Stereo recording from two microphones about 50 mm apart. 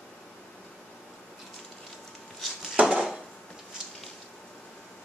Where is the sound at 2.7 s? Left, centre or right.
Right.